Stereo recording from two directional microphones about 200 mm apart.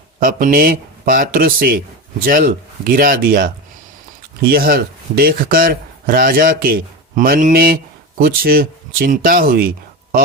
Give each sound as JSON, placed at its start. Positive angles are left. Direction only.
{"t": 0.2, "sound": "speech", "side_deg": -45}